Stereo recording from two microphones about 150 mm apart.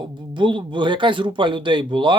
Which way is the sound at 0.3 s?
30° right (ahead or behind).